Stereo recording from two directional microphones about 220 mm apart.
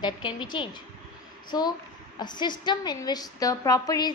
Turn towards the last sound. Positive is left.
turn(degrees=15)  # may be behind; listen again after turning